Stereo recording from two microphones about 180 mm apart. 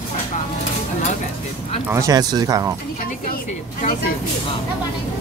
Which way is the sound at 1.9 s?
20° right (ahead or behind).